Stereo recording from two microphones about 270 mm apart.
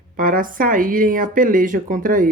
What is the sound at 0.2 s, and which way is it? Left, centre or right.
Speech, right.